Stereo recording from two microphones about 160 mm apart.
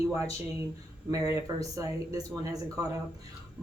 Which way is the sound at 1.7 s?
20° right (ahead or behind).